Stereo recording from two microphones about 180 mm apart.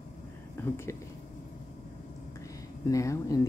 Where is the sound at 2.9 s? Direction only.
15° left (ahead or behind).